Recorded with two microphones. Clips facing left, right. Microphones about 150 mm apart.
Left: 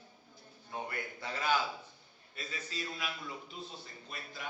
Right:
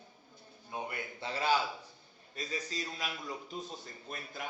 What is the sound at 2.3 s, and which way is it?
A man's voice, 40° right (ahead or behind).